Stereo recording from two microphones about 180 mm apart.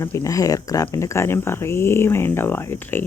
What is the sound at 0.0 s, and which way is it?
Speech, 15° left (ahead or behind).